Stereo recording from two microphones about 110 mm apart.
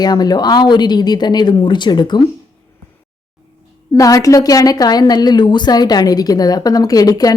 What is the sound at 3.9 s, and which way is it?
A woman's voice, 30° left (ahead or behind).